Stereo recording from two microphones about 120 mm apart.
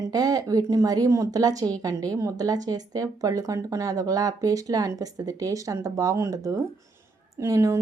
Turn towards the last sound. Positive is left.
turn(degrees=-25)  # may be behind; listen again after turning